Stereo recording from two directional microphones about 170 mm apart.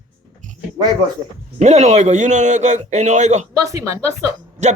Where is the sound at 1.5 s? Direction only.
45° right (ahead or behind).